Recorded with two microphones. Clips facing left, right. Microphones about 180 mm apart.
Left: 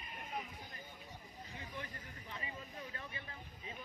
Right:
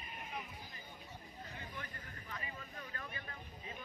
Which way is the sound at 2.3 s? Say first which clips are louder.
Left 1 dB; 25° left (ahead or behind).